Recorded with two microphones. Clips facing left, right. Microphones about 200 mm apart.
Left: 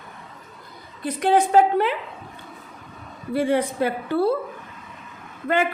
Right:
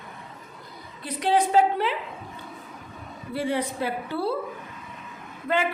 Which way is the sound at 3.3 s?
55° left (ahead or behind).